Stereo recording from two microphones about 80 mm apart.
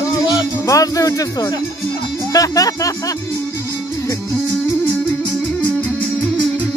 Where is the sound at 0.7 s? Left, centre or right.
Left.